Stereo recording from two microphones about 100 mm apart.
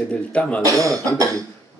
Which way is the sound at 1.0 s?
35° right (ahead or behind).